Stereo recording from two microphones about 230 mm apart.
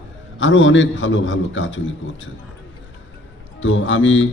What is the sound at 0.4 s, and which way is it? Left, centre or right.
A man's voice, left.